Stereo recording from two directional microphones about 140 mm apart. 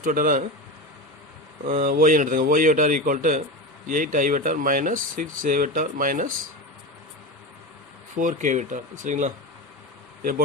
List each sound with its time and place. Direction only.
0.0 s speech: 75° right (ahead or behind)
1.6 s speech: 80° right
8.1 s speech: 70° right (ahead or behind)